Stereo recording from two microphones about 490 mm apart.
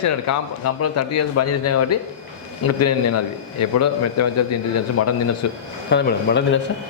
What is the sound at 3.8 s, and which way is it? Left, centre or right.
A man's voice, left.